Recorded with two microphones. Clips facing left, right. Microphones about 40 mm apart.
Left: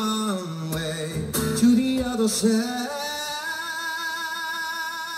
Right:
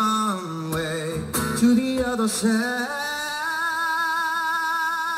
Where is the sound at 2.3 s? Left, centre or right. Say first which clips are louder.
Even; right.